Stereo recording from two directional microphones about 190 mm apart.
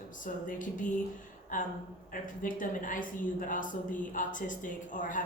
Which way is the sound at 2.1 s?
45° left (ahead or behind).